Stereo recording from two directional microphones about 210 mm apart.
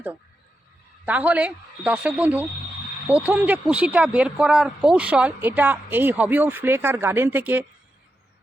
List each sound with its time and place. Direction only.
1.0 s speech: 5° right (ahead or behind)